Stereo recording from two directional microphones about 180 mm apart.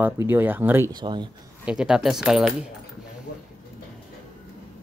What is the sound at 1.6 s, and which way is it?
Speech, 5° right (ahead or behind).